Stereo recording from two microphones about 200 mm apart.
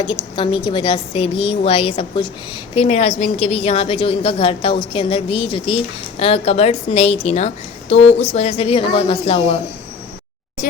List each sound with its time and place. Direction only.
0.0 s a woman's voice: 25° left (ahead or behind)